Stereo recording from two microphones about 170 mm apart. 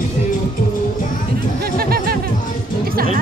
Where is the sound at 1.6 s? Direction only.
65° right (ahead or behind).